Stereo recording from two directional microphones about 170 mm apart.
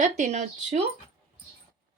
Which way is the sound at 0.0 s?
45° right (ahead or behind).